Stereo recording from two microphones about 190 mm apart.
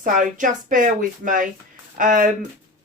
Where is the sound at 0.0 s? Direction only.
45° right (ahead or behind).